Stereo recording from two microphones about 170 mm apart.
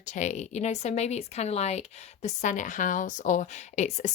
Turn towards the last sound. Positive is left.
turn(degrees=45)  # may be behind; listen again after turning